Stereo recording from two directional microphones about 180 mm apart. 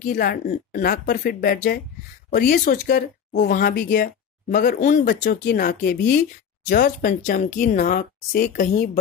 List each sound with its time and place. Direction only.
0.0 s speech: 50° left (ahead or behind)